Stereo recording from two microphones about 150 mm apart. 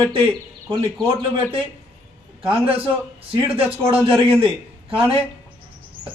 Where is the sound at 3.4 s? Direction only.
35° right (ahead or behind).